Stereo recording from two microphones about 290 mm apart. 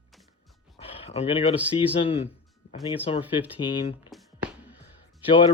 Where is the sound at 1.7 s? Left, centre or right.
Centre.